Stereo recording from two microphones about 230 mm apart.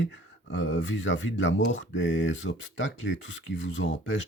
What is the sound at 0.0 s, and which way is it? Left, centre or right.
Speech, left.